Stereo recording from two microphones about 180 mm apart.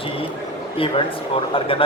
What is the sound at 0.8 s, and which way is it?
A man's voice, 30° left (ahead or behind).